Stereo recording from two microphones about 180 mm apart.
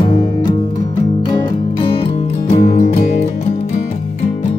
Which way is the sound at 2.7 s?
40° left (ahead or behind).